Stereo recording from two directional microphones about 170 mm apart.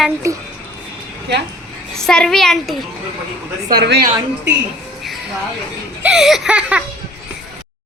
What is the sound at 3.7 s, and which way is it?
Speech, 70° right (ahead or behind).